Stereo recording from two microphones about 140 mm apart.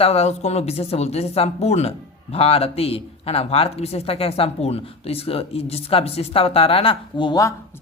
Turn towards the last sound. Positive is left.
turn(degrees=30)  # may be behind; listen again after turning